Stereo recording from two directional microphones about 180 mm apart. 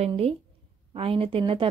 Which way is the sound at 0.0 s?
30° right (ahead or behind).